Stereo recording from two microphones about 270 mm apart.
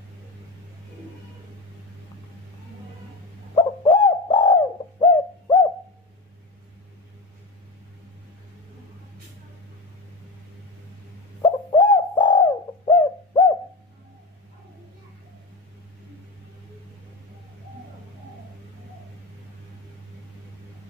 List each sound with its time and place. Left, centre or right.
3.5 s bird: centre
11.4 s bird: centre